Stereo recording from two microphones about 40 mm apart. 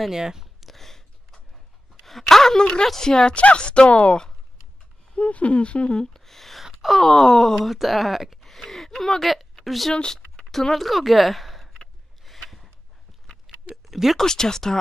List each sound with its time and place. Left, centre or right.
0.1 s speech: centre
0.6 s a sound: centre
2.0 s a sound: centre
2.9 s speech: centre
3.3 s speech: left
6.1 s speech: centre
6.6 s wail: centre
6.9 s speech: centre
7.5 s speech: centre
9.2 s a woman's voice: centre
10.1 s a sound: centre
14.1 s speech: centre